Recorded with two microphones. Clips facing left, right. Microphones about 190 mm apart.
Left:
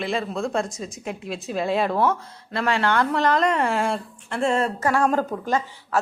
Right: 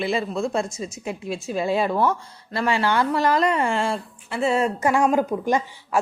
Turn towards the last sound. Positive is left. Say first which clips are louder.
# right 1 dB
turn(degrees=-15)  # may be behind; listen again after turning